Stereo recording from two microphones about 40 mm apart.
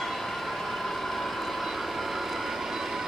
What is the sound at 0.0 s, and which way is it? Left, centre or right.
Vehicle, centre.